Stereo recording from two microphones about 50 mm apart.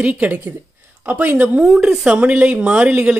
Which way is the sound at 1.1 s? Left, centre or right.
Right.